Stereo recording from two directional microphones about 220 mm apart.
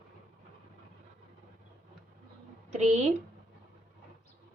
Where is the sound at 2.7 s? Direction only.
30° right (ahead or behind).